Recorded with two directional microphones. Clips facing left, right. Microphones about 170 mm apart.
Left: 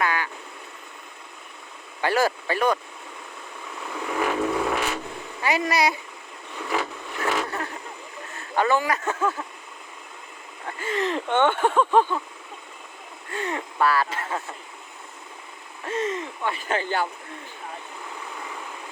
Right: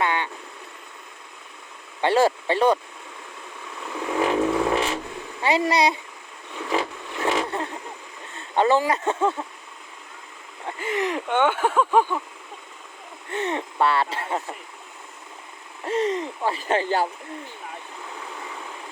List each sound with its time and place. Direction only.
0.0 s vehicle: 25° right (ahead or behind)
2.0 s speech: 25° right (ahead or behind)
4.3 s vehicle: 25° right (ahead or behind)
5.4 s speech: 25° right (ahead or behind)
6.7 s vehicle: 20° right (ahead or behind)
8.3 s speech: 25° right (ahead or behind)
10.7 s speech: 20° right (ahead or behind)
13.3 s speech: 25° right (ahead or behind)
15.8 s speech: 30° right (ahead or behind)